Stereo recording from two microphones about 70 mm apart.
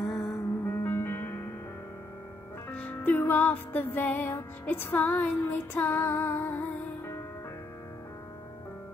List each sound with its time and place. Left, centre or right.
0.0 s music: centre
0.7 s music: left
2.7 s music: centre